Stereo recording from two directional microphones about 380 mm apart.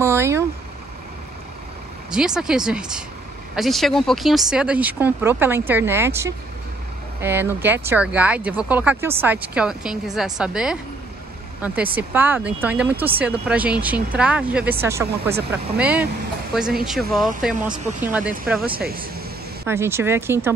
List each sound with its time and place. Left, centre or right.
0.0 s vehicle: centre
2.0 s speech: centre
18.8 s speech: right
19.6 s speech: centre